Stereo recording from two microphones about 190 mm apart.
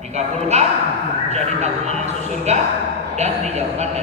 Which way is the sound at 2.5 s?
35° right (ahead or behind).